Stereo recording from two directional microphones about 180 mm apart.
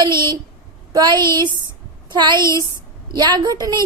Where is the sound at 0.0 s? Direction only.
25° right (ahead or behind).